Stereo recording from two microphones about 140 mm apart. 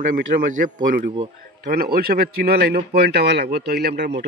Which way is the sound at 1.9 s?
90° right.